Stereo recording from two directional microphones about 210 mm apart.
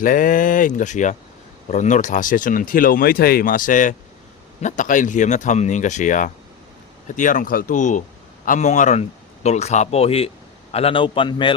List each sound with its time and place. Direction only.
0.0 s speech: 40° left (ahead or behind); by 11.5 s 25° left (ahead or behind)